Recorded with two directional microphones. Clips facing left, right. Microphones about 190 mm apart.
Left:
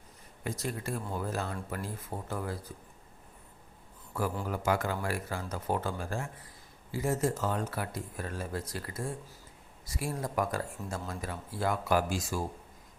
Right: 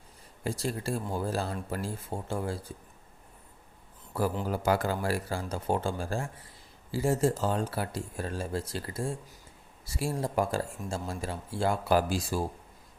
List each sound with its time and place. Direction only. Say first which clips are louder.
0.4 s speech: right 4 dB; 30° right (ahead or behind)
4.4 s speech: right 2 dB; 35° right (ahead or behind)